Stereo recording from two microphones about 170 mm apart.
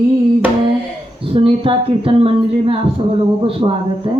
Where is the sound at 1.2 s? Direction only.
35° right (ahead or behind).